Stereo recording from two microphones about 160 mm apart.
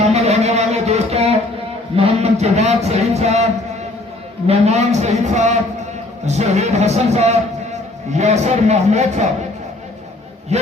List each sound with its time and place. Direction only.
0.0 s music: 45° right (ahead or behind)
2.0 s a sound: 40° right (ahead or behind)
4.4 s a man's voice: 45° right (ahead or behind)
10.5 s a man's voice: 45° right (ahead or behind)